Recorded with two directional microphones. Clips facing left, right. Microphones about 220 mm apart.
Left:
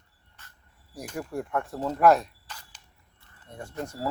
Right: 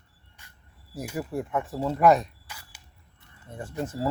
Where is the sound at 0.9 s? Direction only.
5° right (ahead or behind).